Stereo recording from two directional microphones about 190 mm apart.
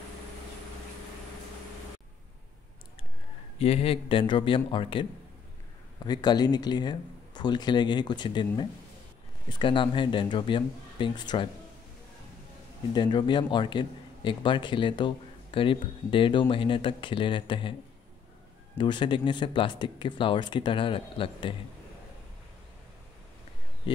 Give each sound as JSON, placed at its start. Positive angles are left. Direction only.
{"t": 3.5, "sound": "a man's voice", "side_deg": 30}
{"t": 6.0, "sound": "a man's voice", "side_deg": 20}
{"t": 12.9, "sound": "a man's voice", "side_deg": 25}
{"t": 18.8, "sound": "a man's voice", "side_deg": 25}